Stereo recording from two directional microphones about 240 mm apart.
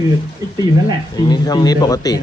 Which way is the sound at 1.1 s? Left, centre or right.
Centre.